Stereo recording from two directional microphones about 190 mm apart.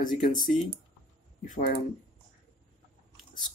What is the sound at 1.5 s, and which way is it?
Speech, 50° left (ahead or behind).